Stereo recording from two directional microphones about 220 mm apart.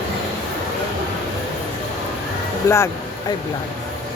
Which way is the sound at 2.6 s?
10° left (ahead or behind).